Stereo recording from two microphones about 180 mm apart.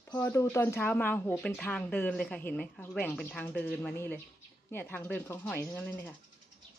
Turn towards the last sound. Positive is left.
turn(degrees=10)  # may be behind; listen again after turning